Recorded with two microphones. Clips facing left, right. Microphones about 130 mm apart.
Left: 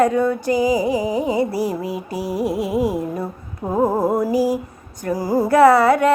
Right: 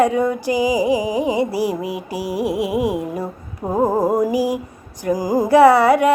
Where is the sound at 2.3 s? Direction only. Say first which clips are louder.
Right 1 dB; 65° right (ahead or behind).